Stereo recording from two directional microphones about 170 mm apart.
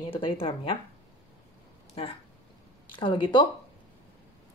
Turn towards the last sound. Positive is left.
turn(degrees=30)  # may be behind; listen again after turning